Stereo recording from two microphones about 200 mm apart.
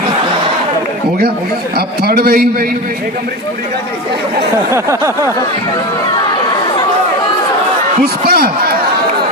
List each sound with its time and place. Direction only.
2.0 s a man's voice: 50° right (ahead or behind)
4.7 s a sound: 15° right (ahead or behind)
8.0 s a man's voice: 50° right (ahead or behind)